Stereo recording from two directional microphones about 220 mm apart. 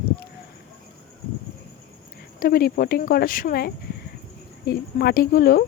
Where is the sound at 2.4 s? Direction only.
40° left (ahead or behind).